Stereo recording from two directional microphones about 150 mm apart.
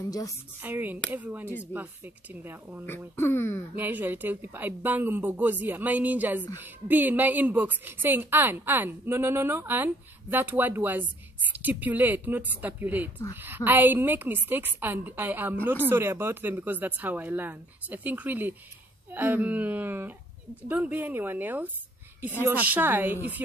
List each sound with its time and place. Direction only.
0.0 s a woman's voice: 25° left (ahead or behind)
0.6 s a woman's voice: 10° right (ahead or behind)
3.2 s speech: 15° left (ahead or behind)
3.7 s a woman's voice: 15° right (ahead or behind)